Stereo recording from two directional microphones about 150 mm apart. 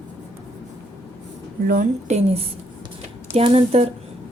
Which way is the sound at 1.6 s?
60° right (ahead or behind).